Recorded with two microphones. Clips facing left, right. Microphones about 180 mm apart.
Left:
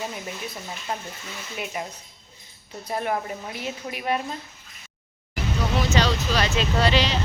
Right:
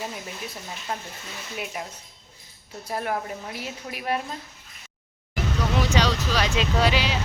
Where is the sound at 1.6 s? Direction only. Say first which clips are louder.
Left 2 dB; centre (ahead or behind).